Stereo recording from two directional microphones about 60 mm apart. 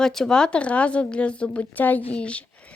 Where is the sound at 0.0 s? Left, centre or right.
Centre.